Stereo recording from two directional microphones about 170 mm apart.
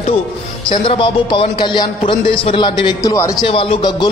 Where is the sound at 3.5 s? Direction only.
30° left (ahead or behind).